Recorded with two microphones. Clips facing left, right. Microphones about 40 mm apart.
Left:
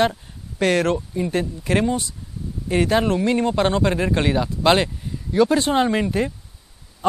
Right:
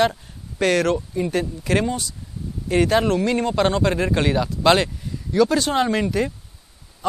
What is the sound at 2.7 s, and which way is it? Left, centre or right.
Speech, centre.